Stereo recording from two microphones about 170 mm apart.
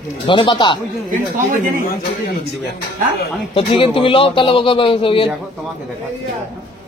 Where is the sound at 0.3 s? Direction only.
25° left (ahead or behind).